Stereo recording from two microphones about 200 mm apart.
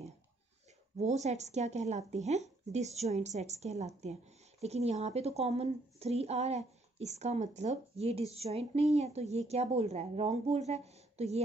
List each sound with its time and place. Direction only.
0.9 s speech: 35° right (ahead or behind)